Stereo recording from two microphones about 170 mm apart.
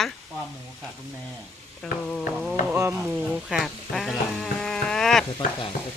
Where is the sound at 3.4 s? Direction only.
Centre (ahead or behind).